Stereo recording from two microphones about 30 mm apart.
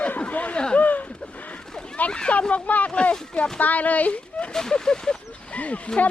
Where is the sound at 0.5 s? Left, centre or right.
Left.